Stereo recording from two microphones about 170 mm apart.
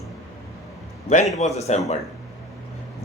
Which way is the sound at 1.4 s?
40° left (ahead or behind).